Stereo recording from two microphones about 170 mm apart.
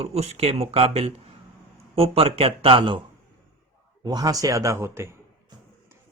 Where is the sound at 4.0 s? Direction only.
20° right (ahead or behind).